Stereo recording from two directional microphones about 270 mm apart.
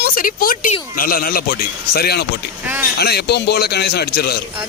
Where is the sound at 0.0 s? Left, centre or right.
Left.